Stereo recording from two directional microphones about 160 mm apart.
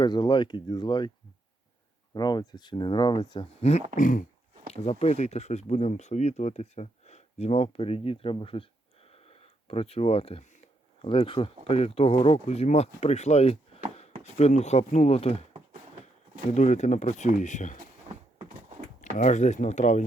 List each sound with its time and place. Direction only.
0.0 s speech: 25° left (ahead or behind)
2.1 s speech: 25° left (ahead or behind)
3.9 s throat clearing: 55° left (ahead or behind)
4.7 s speech: 40° left (ahead or behind)
11.0 s speech: 35° left (ahead or behind)
16.5 s speech: 45° left (ahead or behind)
19.1 s speech: 50° left (ahead or behind)